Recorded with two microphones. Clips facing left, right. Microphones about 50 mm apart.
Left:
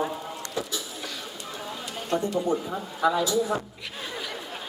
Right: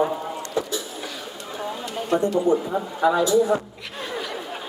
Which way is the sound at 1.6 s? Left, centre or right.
Centre.